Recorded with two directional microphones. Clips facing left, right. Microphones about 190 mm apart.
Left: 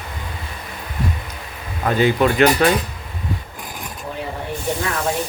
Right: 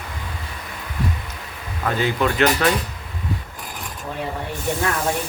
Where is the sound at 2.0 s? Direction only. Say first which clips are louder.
Left 5 dB; 15° left (ahead or behind).